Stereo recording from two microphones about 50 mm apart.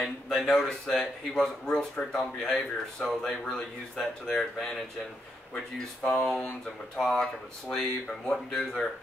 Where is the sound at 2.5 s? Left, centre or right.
Centre.